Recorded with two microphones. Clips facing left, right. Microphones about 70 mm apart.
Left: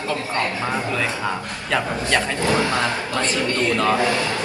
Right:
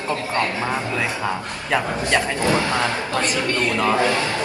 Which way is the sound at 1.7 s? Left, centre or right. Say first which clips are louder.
Right 1 dB; right.